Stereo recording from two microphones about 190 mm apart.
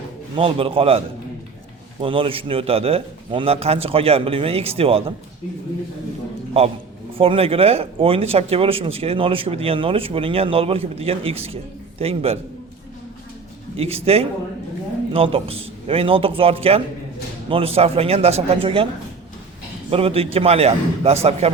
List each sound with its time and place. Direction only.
0.3 s a man's voice: 30° right (ahead or behind)
7.2 s speech: 30° right (ahead or behind)
13.7 s speech: 30° right (ahead or behind)
19.9 s speech: 30° right (ahead or behind)